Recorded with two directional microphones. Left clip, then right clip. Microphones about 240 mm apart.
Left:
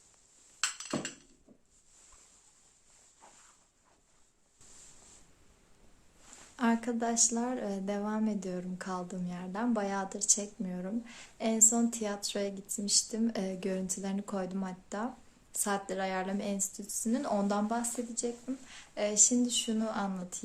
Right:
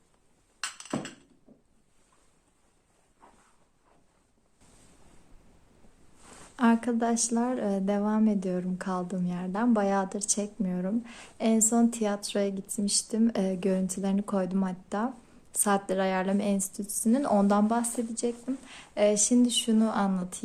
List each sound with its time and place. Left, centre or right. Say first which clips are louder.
6.6 s a woman's voice: right 5 dB; right